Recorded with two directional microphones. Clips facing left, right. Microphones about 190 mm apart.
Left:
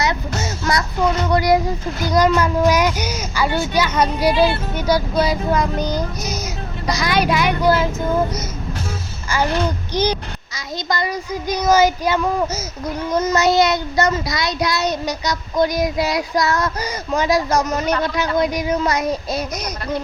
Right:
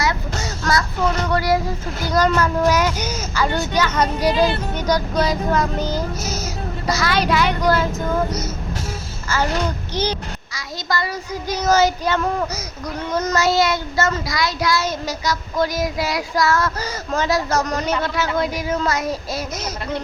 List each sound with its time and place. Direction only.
0.0 s music: 20° left (ahead or behind)
1.3 s a child's voice: 15° left (ahead or behind)
9.9 s a child's voice: 15° left (ahead or behind)
13.3 s child singing: 20° left (ahead or behind)
18.0 s a child's voice: 15° left (ahead or behind)
18.3 s child singing: 15° left (ahead or behind)